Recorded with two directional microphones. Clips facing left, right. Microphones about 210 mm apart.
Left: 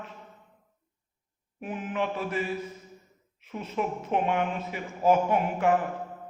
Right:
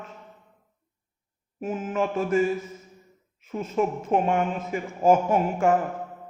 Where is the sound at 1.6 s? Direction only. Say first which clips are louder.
Right 4 dB; 45° right (ahead or behind).